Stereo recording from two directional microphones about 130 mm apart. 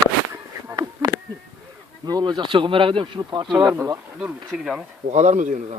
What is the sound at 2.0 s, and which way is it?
Speech, 30° right (ahead or behind).